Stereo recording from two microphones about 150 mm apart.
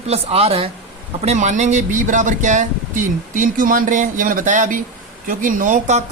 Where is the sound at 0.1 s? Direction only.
45° right (ahead or behind).